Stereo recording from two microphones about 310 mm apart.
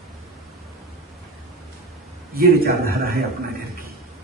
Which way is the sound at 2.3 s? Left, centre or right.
Right.